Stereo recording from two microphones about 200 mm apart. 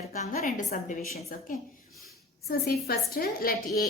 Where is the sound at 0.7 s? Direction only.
50° left (ahead or behind).